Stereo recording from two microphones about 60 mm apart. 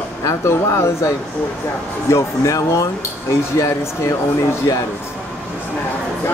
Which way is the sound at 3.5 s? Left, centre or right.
Left.